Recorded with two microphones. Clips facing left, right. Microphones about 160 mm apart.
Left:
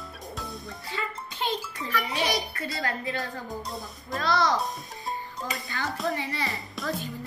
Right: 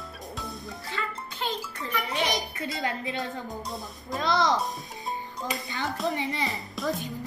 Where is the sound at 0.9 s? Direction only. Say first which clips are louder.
Left 1 dB; 15° left (ahead or behind).